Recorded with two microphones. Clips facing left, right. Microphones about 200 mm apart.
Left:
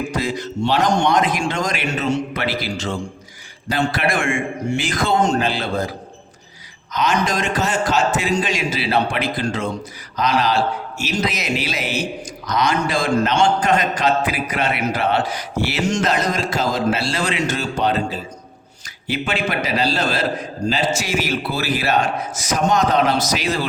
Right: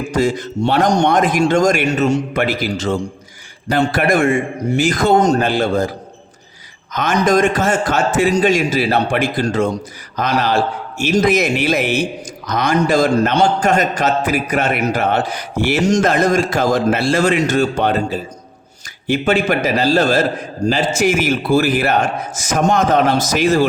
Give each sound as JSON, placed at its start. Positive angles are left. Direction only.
{"t": 0.2, "sound": "a man's voice", "side_deg": -50}
{"t": 6.9, "sound": "a man's voice", "side_deg": -50}